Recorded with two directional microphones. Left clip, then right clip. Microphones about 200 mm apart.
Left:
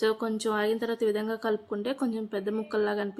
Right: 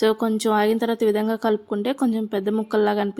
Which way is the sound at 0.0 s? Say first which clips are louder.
Right 7 dB; 35° right (ahead or behind).